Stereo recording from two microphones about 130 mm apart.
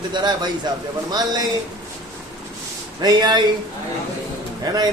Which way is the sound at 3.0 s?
35° right (ahead or behind).